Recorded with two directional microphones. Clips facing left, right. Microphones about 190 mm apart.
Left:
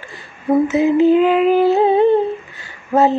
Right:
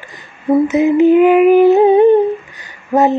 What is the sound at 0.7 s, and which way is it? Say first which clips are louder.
Humming: right 3 dB; 20° right (ahead or behind).